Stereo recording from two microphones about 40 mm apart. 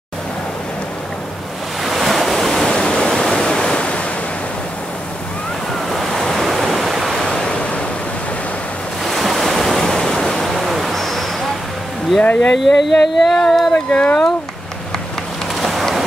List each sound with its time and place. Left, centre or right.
1.8 s waves: centre
2.6 s waterfall: left
5.9 s waves: centre
7.2 s waves: centre
9.0 s waves: centre
12.2 s speech: left
12.5 s a sound: centre
13.7 s speech: left
15.6 s vehicle: centre